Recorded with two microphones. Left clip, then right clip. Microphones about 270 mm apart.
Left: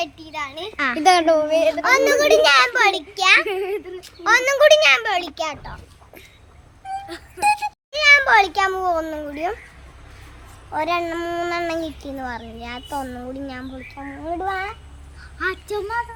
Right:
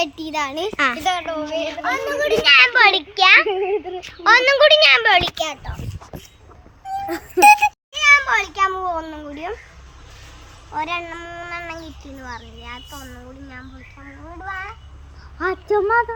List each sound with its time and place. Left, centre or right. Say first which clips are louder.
0.0 s speech: right 5 dB; centre
0.9 s a child's voice: left 7 dB; left
2.6 s a child's voice: right 4 dB; centre
2.8 s speech: right 4 dB; centre
7.4 s a sound: right 8 dB; centre
8.0 s a child's voice: left 1 dB; centre
10.7 s a child's voice: left 3 dB; centre
15.4 s a child's voice: right 5 dB; centre